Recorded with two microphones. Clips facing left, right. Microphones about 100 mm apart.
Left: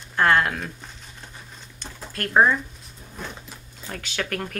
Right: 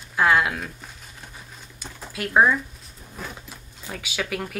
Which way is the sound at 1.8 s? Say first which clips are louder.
Even; 5° right (ahead or behind).